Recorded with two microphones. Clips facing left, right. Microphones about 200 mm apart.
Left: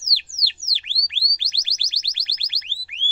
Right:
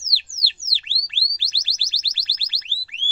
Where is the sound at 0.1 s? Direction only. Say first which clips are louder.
Right 1 dB; 20° left (ahead or behind).